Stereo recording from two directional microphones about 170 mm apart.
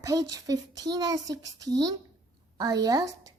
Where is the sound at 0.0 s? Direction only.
20° right (ahead or behind).